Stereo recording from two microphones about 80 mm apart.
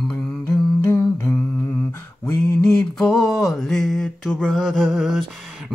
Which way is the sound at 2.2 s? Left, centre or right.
Centre.